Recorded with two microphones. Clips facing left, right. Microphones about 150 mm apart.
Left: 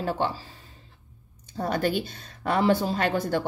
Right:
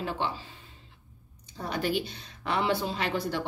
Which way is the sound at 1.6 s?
45° left (ahead or behind).